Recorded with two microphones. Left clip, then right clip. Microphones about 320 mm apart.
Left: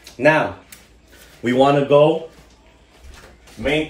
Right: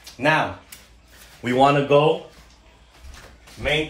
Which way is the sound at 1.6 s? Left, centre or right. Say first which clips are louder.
Left 2 dB; centre.